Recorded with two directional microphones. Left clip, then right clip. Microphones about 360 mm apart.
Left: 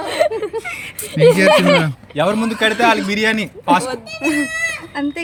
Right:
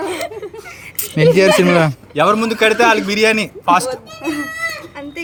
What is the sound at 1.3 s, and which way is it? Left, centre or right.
Speech, centre.